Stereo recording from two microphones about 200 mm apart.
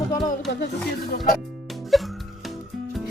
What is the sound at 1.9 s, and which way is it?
Music, centre (ahead or behind).